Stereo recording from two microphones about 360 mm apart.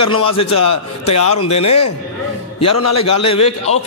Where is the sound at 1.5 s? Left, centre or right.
Centre.